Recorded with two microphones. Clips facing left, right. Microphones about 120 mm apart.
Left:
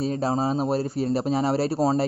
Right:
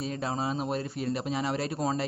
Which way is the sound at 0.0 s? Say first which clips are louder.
Left 7 dB; 35° left (ahead or behind).